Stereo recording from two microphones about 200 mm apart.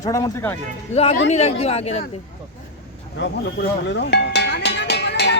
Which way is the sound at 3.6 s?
60° left (ahead or behind).